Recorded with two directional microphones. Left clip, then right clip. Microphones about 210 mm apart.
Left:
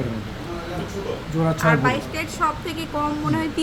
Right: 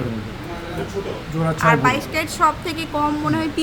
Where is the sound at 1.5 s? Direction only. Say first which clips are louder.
Right 4 dB; 15° right (ahead or behind).